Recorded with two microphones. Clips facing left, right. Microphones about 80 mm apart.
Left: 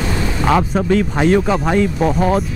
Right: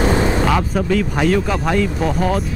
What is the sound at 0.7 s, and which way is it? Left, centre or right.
Speech, left.